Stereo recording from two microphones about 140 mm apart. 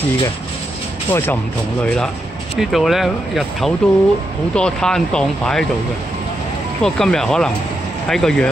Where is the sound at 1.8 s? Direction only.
5° left (ahead or behind).